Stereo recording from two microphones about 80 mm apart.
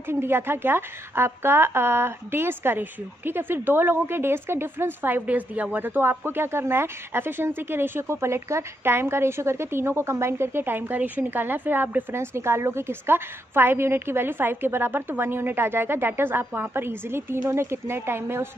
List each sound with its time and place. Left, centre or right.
0.1 s a woman's voice: right